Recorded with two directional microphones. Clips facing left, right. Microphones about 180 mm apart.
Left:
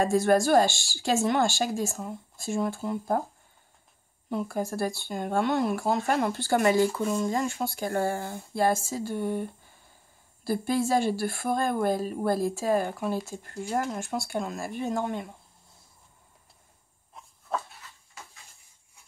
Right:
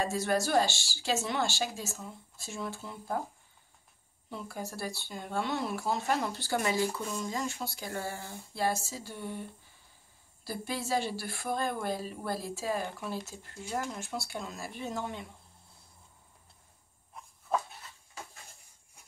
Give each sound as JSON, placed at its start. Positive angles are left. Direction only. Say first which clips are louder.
{"t": 0.0, "sound": "speech", "louder": "left 8 dB", "side_deg": 50}
{"t": 4.3, "sound": "speech", "louder": "left 10 dB", "side_deg": 50}